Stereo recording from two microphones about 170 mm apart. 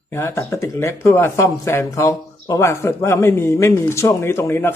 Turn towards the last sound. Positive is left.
turn(degrees=15)  # may be behind; listen again after turning